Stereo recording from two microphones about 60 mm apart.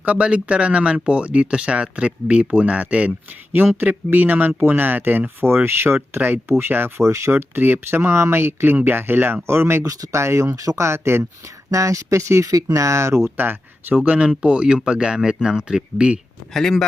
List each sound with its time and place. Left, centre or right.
0.0 s speech: right
3.5 s speech: right
7.0 s speech: right
7.5 s speech: right
9.5 s speech: right
9.8 s speech: right
10.8 s speech: right
11.7 s speech: right
12.5 s speech: right
13.3 s speech: right; by 16.2 s centre
16.6 s speech: centre